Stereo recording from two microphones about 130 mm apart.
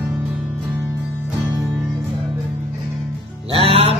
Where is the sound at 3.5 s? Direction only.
45° right (ahead or behind).